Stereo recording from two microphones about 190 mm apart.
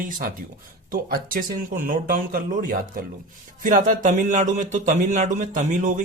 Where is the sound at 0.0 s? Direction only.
45° right (ahead or behind).